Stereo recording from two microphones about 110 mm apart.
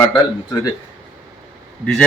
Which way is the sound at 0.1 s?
35° left (ahead or behind).